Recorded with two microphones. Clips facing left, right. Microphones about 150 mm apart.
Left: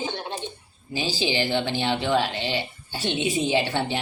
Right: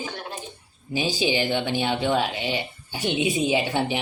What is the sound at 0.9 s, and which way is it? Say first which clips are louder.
Speech: right 2 dB; 15° right (ahead or behind).